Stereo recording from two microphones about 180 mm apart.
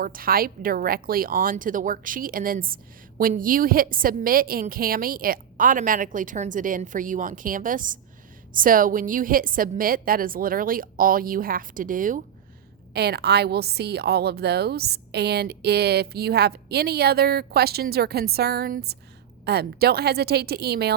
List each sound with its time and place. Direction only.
0.0 s a woman's voice: 55° right (ahead or behind)
12.9 s a woman's voice: 65° right (ahead or behind)